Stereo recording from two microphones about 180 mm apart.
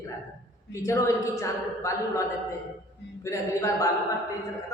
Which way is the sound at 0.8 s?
15° left (ahead or behind).